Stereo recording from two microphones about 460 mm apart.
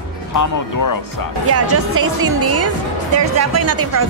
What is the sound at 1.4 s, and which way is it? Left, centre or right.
Speech, right.